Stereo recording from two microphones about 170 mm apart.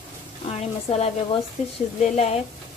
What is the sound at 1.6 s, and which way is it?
Speech, 40° left (ahead or behind).